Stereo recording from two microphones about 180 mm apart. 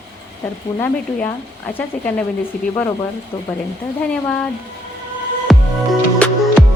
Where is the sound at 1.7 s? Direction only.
10° left (ahead or behind).